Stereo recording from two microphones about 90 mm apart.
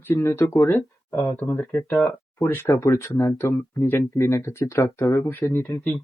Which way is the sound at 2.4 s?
25° left (ahead or behind).